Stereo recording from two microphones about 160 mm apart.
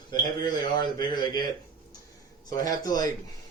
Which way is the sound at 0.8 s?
25° left (ahead or behind).